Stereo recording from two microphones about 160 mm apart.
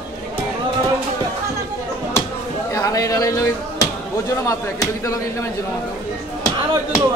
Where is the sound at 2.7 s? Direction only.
20° left (ahead or behind).